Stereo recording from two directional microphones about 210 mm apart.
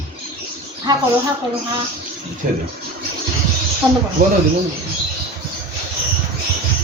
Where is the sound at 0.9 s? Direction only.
20° right (ahead or behind).